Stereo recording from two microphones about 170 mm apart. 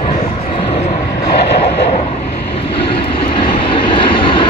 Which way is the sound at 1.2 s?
75° left (ahead or behind).